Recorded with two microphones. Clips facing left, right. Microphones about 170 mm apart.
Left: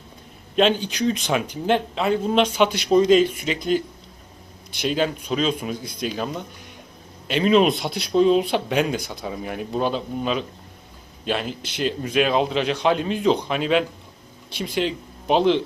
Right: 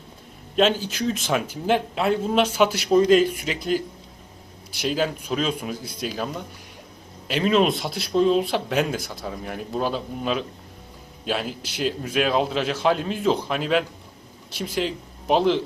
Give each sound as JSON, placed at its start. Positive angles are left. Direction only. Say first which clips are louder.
{"t": 0.5, "sound": "speech", "louder": "left 1 dB", "side_deg": -5}